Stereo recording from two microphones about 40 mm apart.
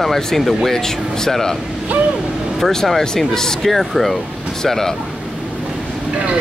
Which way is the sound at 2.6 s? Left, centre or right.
Centre.